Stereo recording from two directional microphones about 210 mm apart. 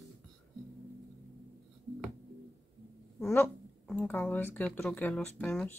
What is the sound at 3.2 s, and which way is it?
Speech, 5° left (ahead or behind).